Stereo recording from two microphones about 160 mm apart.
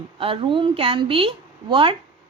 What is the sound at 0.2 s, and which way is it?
A woman's voice, 35° right (ahead or behind).